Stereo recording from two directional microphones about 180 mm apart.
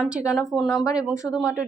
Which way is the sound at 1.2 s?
5° left (ahead or behind).